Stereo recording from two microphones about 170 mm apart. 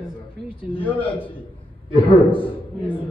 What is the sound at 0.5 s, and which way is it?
Speech, 30° left (ahead or behind).